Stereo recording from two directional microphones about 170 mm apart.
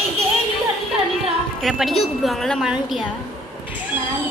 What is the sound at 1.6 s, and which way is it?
A woman's voice, centre (ahead or behind).